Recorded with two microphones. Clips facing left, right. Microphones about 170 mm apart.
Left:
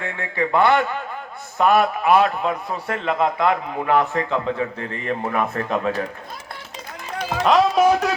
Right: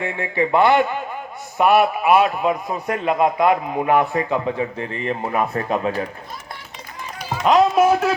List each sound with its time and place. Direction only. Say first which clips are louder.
0.0 s a man's voice: right 3 dB; 15° right (ahead or behind)
7.4 s a man's voice: right 1 dB; 10° right (ahead or behind)